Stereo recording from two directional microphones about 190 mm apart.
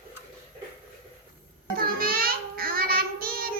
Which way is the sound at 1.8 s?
50° right (ahead or behind).